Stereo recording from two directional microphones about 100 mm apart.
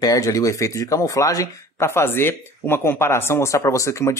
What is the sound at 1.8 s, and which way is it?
Speech, 25° left (ahead or behind).